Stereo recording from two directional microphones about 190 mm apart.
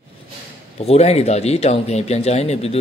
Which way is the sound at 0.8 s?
35° left (ahead or behind).